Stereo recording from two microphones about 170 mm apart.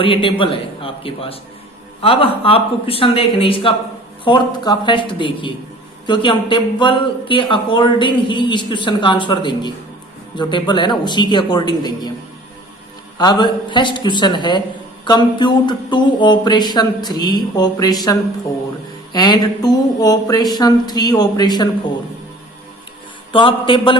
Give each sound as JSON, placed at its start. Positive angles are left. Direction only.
{"t": 0.0, "sound": "speech", "side_deg": 30}
{"t": 13.1, "sound": "speech", "side_deg": 25}
{"t": 23.3, "sound": "speech", "side_deg": 30}